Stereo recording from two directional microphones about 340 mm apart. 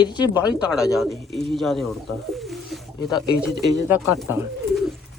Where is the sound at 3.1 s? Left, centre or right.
Centre.